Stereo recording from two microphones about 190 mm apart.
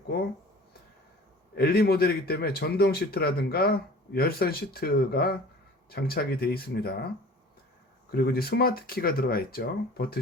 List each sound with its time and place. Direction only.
1.5 s speech: 55° left (ahead or behind)
8.1 s speech: 55° left (ahead or behind)